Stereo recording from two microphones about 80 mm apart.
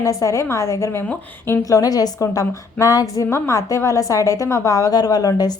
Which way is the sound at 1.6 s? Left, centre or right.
Left.